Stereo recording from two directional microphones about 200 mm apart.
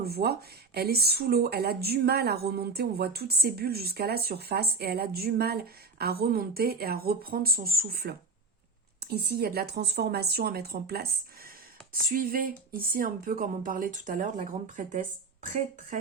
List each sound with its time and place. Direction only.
0.0 s speech: 50° right (ahead or behind)